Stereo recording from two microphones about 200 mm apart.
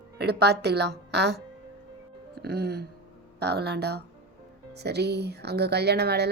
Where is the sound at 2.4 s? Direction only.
55° right (ahead or behind).